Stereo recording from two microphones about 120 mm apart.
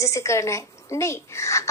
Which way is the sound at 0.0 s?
25° left (ahead or behind).